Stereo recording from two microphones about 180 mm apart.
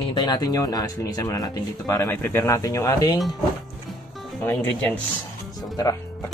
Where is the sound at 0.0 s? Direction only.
25° left (ahead or behind).